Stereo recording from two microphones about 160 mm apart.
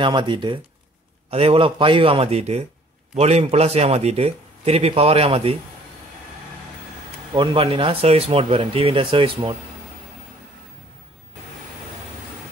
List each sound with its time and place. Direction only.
0.0 s speech: 30° right (ahead or behind)
7.3 s speech: 35° right (ahead or behind)